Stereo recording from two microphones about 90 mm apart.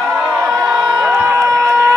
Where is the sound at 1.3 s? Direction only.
35° right (ahead or behind).